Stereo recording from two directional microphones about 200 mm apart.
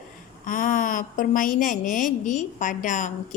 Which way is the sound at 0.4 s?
40° left (ahead or behind).